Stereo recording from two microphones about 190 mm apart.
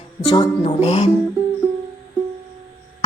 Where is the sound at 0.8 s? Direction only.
35° left (ahead or behind).